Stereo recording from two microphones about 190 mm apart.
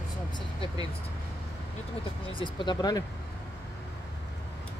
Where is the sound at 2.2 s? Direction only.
25° left (ahead or behind).